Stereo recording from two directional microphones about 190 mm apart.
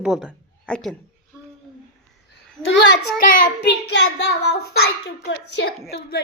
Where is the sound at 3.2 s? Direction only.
45° left (ahead or behind).